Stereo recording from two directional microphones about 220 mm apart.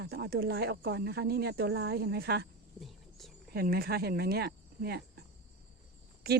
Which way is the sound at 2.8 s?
Centre (ahead or behind).